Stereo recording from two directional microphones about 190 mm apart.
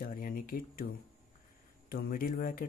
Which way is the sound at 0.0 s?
50° left (ahead or behind).